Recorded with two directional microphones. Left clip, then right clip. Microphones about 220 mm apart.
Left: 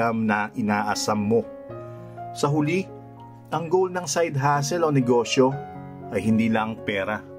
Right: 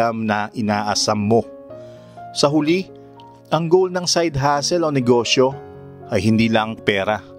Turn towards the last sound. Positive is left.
turn(degrees=-50)  # may be behind; listen again after turning